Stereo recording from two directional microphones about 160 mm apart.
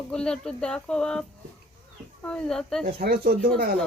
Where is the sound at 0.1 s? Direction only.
5° left (ahead or behind).